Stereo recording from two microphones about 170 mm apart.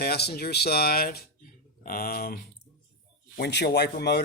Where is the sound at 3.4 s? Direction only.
75° left (ahead or behind).